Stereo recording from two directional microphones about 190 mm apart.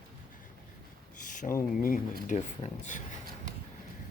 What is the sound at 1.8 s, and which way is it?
Speech, 45° left (ahead or behind).